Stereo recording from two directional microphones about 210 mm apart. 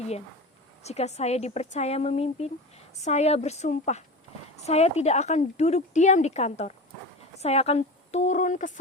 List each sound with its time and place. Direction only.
0.8 s a woman's voice: 30° left (ahead or behind)